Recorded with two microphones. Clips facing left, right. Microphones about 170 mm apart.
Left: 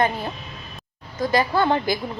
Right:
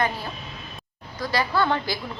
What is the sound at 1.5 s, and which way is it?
Speech, 20° left (ahead or behind).